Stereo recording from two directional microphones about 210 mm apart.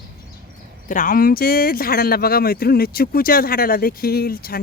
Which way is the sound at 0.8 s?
40° left (ahead or behind).